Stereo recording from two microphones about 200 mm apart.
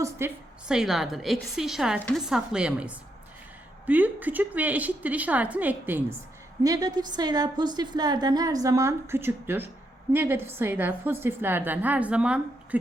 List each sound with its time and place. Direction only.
0.2 s a woman's voice: 10° right (ahead or behind)